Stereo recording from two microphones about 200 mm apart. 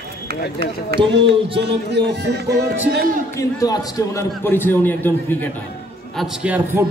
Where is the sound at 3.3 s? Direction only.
20° left (ahead or behind).